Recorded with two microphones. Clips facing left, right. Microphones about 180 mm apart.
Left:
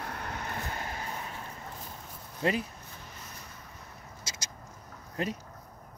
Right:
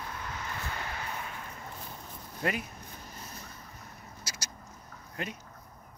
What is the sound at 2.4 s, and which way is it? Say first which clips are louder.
Speech: left 3 dB; 30° left (ahead or behind).